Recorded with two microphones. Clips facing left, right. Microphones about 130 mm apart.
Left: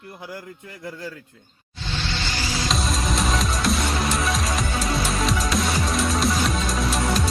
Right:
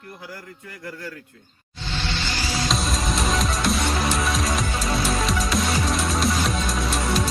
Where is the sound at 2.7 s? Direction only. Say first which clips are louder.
Left 2 dB; centre (ahead or behind).